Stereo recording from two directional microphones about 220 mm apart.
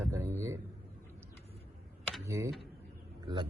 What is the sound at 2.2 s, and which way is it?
Speech, 15° right (ahead or behind).